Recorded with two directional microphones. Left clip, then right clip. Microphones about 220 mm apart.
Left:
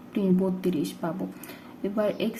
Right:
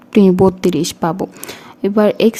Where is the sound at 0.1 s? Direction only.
50° right (ahead or behind).